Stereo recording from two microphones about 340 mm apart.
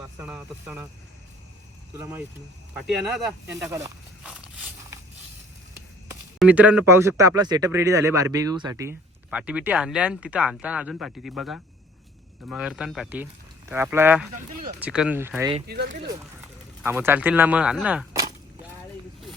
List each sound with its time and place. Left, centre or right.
0.2 s speech: centre
2.0 s speech: centre
6.4 s speech: centre
14.3 s speech: right
14.8 s speech: centre
15.6 s speech: right
16.8 s speech: centre